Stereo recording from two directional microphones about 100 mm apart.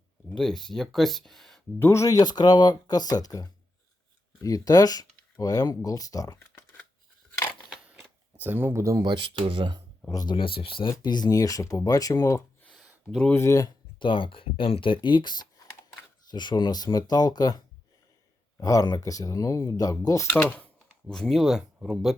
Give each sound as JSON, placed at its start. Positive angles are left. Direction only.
{"t": 0.3, "sound": "speech", "side_deg": 5}
{"t": 1.8, "sound": "speech", "side_deg": 30}
{"t": 7.7, "sound": "a sound", "side_deg": -5}
{"t": 8.4, "sound": "speech", "side_deg": -20}
{"t": 9.0, "sound": "speech", "side_deg": -60}
{"t": 10.1, "sound": "speech", "side_deg": 40}
{"t": 10.3, "sound": "speech", "side_deg": 60}
{"t": 11.0, "sound": "speech", "side_deg": 45}
{"t": 14.0, "sound": "speech", "side_deg": 55}
{"t": 20.3, "sound": "speech", "side_deg": 15}
{"t": 21.1, "sound": "speech", "side_deg": 5}